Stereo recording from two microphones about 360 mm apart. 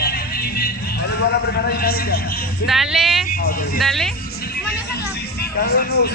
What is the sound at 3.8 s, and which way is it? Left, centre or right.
Speech, centre.